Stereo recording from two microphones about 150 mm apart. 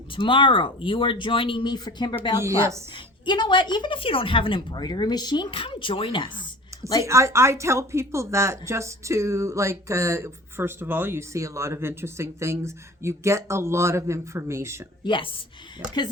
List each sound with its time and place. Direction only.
0.2 s a woman's voice: 35° left (ahead or behind)
2.4 s a woman's voice: 20° right (ahead or behind)
2.9 s a woman's voice: 30° left (ahead or behind)
7.0 s a woman's voice: 20° right (ahead or behind)
15.0 s a woman's voice: 35° left (ahead or behind)